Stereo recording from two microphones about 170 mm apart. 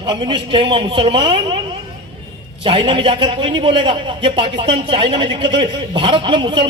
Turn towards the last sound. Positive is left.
turn(degrees=-30)  # may be behind; listen again after turning